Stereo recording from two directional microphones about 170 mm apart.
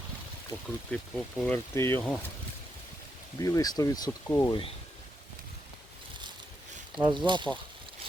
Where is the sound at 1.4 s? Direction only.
10° left (ahead or behind).